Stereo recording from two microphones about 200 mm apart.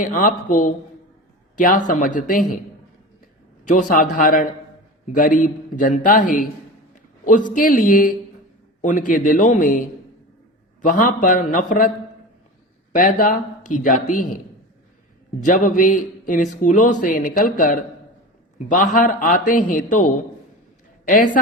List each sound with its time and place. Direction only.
0.0 s a man's voice: 40° left (ahead or behind)
3.7 s a man's voice: 40° left (ahead or behind)
10.8 s a man's voice: 40° left (ahead or behind)
12.9 s speech: 40° left (ahead or behind)
15.4 s a man's voice: 40° left (ahead or behind)